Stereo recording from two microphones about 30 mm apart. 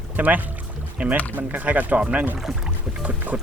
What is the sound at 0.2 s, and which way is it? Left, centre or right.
Speech, right.